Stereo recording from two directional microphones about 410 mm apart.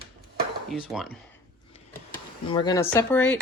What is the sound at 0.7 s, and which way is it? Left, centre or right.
Cutlery, centre.